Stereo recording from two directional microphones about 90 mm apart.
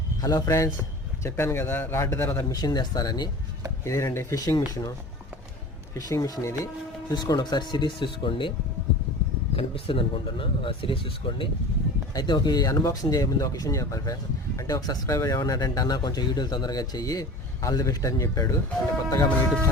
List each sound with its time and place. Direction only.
0.2 s speech: 45° left (ahead or behind)
1.2 s speech: 30° left (ahead or behind)
2.5 s speech: 45° left (ahead or behind)
3.8 s speech: 35° left (ahead or behind)
4.4 s speech: 45° left (ahead or behind)
7.1 s speech: 55° left (ahead or behind)
9.6 s speech: 90° left; by 11.4 s 70° left (ahead or behind)
12.1 s speech: 55° left (ahead or behind); by 18.5 s 40° left (ahead or behind)